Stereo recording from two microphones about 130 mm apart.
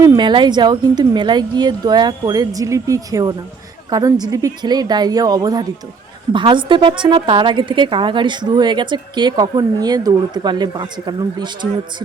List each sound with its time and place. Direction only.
0.0 s a woman's voice: 30° right (ahead or behind)